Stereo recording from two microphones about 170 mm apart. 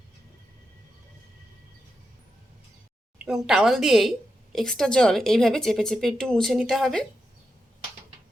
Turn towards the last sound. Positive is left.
turn(degrees=0)  # may be behind; listen again after turning